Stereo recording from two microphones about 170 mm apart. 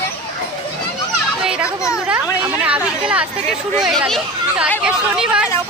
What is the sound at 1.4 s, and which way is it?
Children playing, 5° right (ahead or behind).